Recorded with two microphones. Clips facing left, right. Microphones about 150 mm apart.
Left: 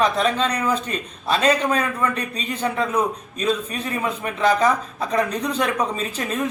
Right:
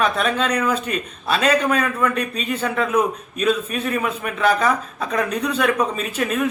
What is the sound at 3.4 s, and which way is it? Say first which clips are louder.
Speech: right 3 dB; 30° left (ahead or behind).